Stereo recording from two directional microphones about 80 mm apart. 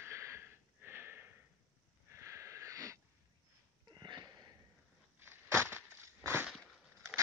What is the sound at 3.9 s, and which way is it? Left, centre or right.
Sniff, right.